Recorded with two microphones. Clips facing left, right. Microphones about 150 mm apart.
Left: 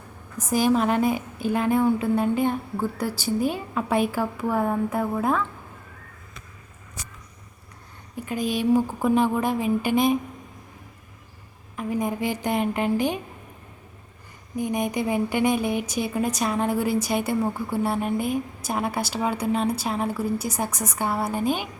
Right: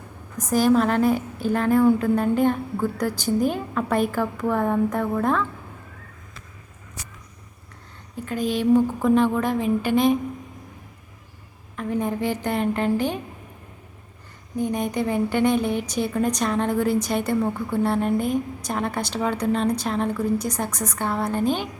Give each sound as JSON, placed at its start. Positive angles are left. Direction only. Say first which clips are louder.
{"t": 0.4, "sound": "a woman's voice", "louder": "right 2 dB", "side_deg": 10}
{"t": 1.1, "sound": "a woman's voice", "louder": "right 3 dB", "side_deg": -40}
{"t": 1.5, "sound": "a woman's voice", "louder": "right 2 dB", "side_deg": 10}
{"t": 1.8, "sound": "a sound", "louder": "right 3 dB", "side_deg": 5}
{"t": 2.4, "sound": "a woman's voice", "louder": "right 3 dB", "side_deg": 10}
{"t": 8.1, "sound": "a woman's voice", "louder": "right 1 dB", "side_deg": 15}
{"t": 11.8, "sound": "a woman's voice", "louder": "right 1 dB", "side_deg": 10}
{"t": 14.6, "sound": "a woman's voice", "louder": "right 1 dB", "side_deg": 10}